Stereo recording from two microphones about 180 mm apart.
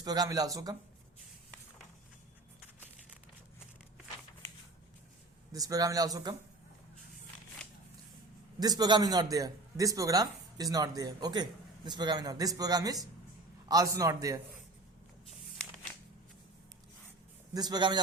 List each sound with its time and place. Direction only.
0.0 s a man's voice: 20° right (ahead or behind)
5.5 s a man's voice: 20° right (ahead or behind)
8.6 s a man's voice: 20° right (ahead or behind)
17.5 s a man's voice: 20° right (ahead or behind)